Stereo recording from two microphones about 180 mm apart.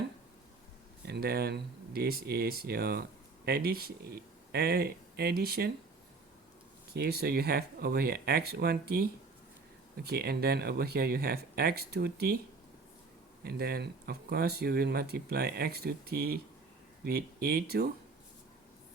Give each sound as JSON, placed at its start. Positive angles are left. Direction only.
{"t": 1.0, "sound": "speech", "side_deg": -60}
{"t": 6.9, "sound": "speech", "side_deg": -60}
{"t": 13.4, "sound": "speech", "side_deg": -60}